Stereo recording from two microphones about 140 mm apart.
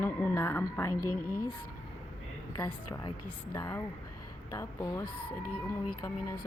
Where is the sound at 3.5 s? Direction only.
20° left (ahead or behind).